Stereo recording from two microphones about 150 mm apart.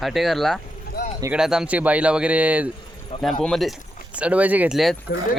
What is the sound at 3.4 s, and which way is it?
Speech, centre (ahead or behind).